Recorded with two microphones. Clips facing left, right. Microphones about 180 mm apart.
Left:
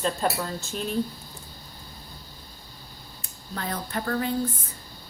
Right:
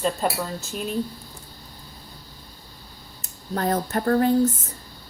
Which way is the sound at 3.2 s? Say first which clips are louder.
Right 8 dB; 45° right (ahead or behind).